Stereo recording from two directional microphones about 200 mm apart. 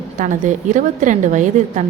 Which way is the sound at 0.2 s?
40° right (ahead or behind).